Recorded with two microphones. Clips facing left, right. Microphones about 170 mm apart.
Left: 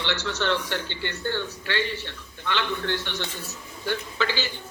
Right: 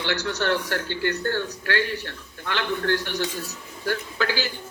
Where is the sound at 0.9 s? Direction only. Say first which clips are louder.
Right 7 dB; 50° right (ahead or behind).